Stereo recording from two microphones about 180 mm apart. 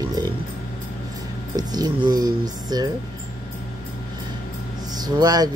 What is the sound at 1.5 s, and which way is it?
Speech, 20° right (ahead or behind).